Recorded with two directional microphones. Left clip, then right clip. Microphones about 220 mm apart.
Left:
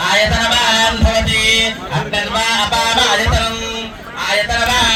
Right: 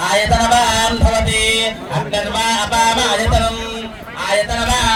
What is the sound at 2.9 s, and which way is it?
Music, 60° right (ahead or behind).